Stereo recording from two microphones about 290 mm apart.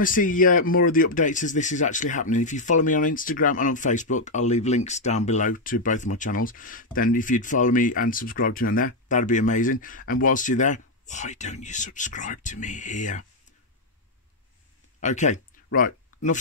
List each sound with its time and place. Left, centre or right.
0.0 s speech: left
15.0 s speech: left